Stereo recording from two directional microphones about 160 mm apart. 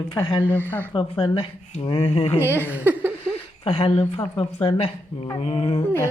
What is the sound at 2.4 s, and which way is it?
Speech, 15° right (ahead or behind).